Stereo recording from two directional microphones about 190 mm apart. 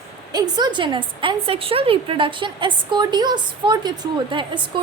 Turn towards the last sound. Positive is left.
turn(degrees=-25)  # may be behind; listen again after turning